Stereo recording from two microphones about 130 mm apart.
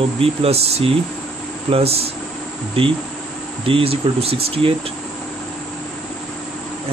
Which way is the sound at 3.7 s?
45° right (ahead or behind).